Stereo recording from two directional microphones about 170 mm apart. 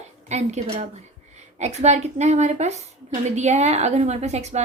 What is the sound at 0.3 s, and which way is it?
A woman's voice, 40° right (ahead or behind).